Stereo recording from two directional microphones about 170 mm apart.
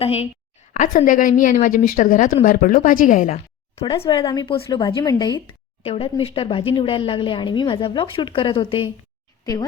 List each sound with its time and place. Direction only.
0.0 s speech: 35° left (ahead or behind)
0.7 s a woman's voice: 50° left (ahead or behind)
3.8 s speech: 30° left (ahead or behind)
5.8 s speech: 35° left (ahead or behind)